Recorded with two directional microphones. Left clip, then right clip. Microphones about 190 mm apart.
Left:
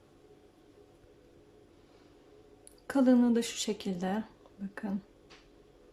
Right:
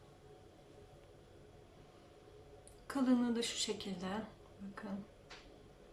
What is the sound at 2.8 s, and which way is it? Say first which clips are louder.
A woman's voice: left 9 dB; 35° left (ahead or behind).